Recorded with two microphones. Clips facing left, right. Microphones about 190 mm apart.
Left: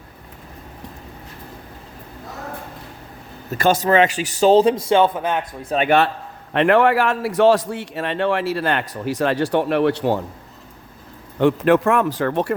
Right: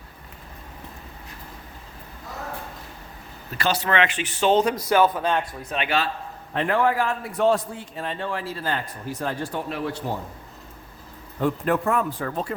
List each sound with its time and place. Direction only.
3.5 s speech: 45° left (ahead or behind); by 5.4 s 20° left (ahead or behind)
5.6 s speech: 40° left (ahead or behind)
6.5 s a man's voice: 75° left (ahead or behind)
11.3 s a man's voice: 85° left